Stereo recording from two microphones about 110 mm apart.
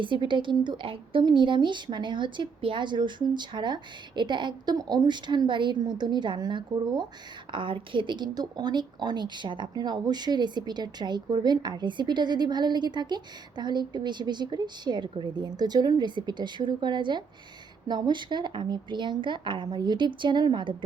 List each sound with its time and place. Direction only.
0.0 s a woman's voice: 45° right (ahead or behind)